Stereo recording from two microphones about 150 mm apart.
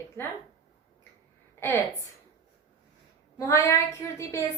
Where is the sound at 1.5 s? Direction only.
15° left (ahead or behind).